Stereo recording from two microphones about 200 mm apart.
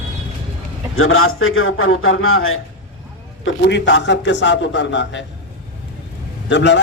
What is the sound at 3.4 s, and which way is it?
A man's voice, 60° left (ahead or behind).